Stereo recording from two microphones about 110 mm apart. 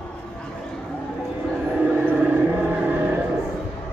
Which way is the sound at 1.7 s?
10° right (ahead or behind).